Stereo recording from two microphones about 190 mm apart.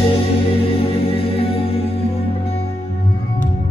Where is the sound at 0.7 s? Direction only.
30° left (ahead or behind).